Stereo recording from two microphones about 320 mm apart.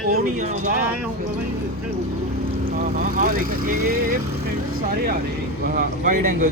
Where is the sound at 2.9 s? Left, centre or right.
Right.